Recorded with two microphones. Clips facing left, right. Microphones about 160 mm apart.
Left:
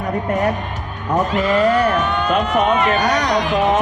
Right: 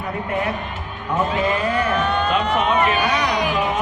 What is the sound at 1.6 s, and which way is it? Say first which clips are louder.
Speech: left 5 dB; 40° left (ahead or behind).